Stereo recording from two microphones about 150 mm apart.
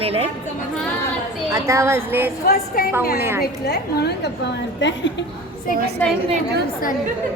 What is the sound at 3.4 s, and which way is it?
Speech, 90° left.